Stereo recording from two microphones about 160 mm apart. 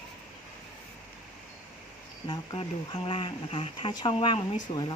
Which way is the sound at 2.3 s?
30° left (ahead or behind).